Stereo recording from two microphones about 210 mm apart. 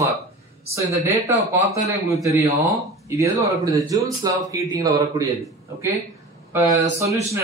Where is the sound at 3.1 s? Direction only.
15° right (ahead or behind).